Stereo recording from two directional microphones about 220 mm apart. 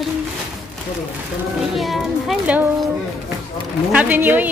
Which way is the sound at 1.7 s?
Centre (ahead or behind).